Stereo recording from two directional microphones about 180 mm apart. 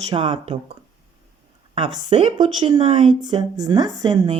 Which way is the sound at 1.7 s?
30° right (ahead or behind).